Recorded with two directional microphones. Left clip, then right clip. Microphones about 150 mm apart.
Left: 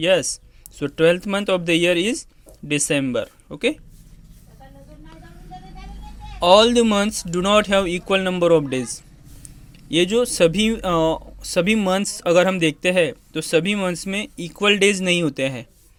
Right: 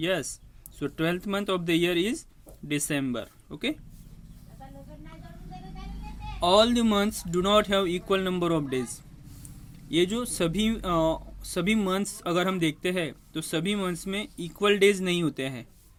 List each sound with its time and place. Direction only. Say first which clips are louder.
0.0 s speech: left 11 dB; 40° left (ahead or behind)
6.4 s speech: left 8 dB; 40° left (ahead or behind)